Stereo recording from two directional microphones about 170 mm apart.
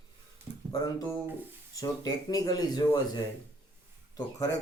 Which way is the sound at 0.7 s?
20° left (ahead or behind).